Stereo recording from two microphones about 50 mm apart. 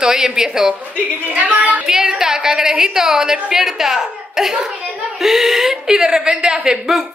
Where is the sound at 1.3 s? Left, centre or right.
Right.